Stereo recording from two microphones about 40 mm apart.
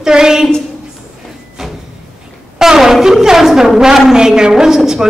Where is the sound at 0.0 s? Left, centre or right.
Centre.